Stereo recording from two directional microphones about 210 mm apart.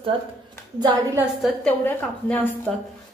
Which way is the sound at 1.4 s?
5° left (ahead or behind).